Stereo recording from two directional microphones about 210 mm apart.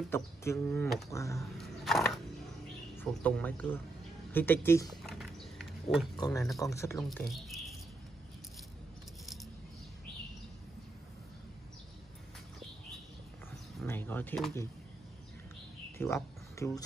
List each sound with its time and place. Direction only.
0.1 s speech: 15° left (ahead or behind)
1.6 s a sound: centre (ahead or behind)
3.0 s speech: 5° left (ahead or behind)
5.0 s a sound: centre (ahead or behind)
5.9 s speech: 20° left (ahead or behind)
7.0 s speech: centre (ahead or behind)
9.2 s coin: centre (ahead or behind)
13.8 s speech: 10° left (ahead or behind)
16.0 s speech: 15° left (ahead or behind)